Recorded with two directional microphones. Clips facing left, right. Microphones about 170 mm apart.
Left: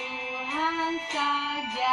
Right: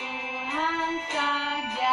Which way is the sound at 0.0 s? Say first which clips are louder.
Right 1 dB; 60° right (ahead or behind).